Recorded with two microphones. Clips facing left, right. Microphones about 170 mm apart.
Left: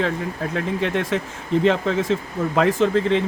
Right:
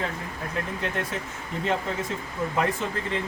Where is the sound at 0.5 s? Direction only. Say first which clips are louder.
Left 7 dB; 90° left.